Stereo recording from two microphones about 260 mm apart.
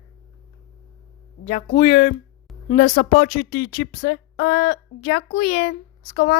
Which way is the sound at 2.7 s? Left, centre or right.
Left.